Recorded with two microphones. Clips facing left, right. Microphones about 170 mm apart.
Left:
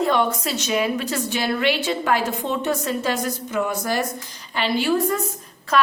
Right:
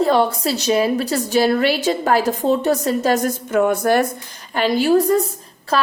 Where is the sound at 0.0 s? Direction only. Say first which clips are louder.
Right 4 dB; 35° right (ahead or behind); by 4.0 s 55° right (ahead or behind).